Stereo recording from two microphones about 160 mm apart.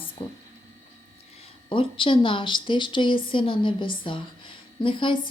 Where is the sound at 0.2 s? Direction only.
35° left (ahead or behind).